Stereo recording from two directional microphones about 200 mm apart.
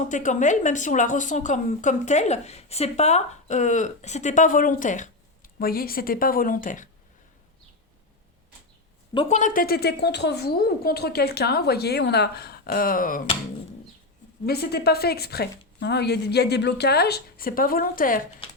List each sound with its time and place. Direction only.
0.1 s a woman's voice: 40° left (ahead or behind)
9.1 s a woman's voice: 35° left (ahead or behind)
14.4 s a woman's voice: 50° left (ahead or behind)